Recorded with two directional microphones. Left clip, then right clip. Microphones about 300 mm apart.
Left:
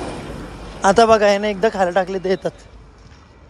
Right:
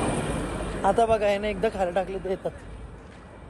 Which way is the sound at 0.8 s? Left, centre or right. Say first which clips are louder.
Left 9 dB; left.